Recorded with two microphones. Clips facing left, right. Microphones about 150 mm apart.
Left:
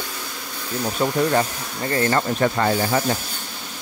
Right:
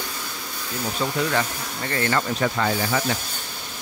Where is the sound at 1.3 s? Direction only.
35° left (ahead or behind).